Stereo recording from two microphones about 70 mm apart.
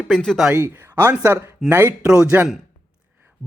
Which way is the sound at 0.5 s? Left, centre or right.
Right.